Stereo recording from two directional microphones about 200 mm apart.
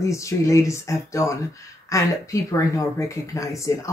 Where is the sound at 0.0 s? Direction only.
15° left (ahead or behind).